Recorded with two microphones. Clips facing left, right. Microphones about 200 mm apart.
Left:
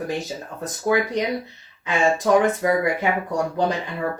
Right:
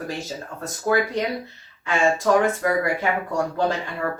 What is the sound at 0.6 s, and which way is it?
Speech, 15° left (ahead or behind).